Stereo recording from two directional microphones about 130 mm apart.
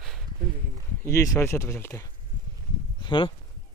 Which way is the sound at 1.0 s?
25° left (ahead or behind).